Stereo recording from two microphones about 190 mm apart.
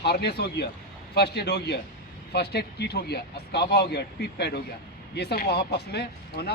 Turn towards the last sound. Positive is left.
turn(degrees=55)  # may be behind; listen again after turning